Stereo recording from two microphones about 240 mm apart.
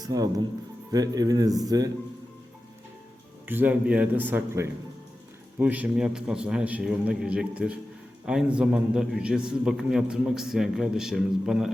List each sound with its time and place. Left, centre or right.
0.0 s speech: centre
3.5 s a man's voice: centre